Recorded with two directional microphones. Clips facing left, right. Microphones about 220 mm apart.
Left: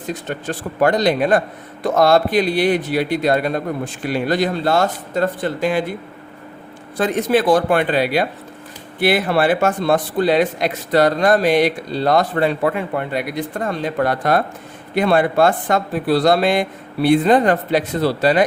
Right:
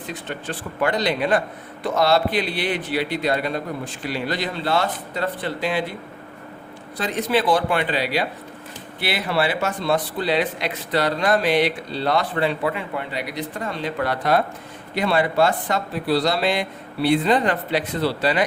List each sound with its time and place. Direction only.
0.1 s speech: 45° left (ahead or behind)
6.9 s speech: 50° left (ahead or behind)